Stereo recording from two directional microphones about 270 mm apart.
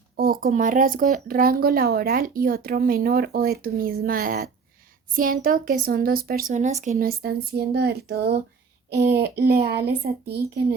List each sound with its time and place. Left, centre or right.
0.2 s speech: right